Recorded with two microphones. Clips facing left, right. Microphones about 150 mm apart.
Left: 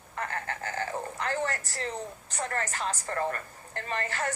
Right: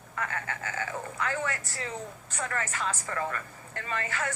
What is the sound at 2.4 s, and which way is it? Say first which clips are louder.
A woman's voice: left 1 dB; 35° left (ahead or behind).